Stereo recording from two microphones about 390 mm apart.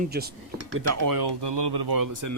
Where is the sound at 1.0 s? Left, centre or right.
Right.